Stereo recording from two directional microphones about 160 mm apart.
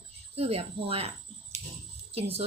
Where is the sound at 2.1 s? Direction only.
40° right (ahead or behind).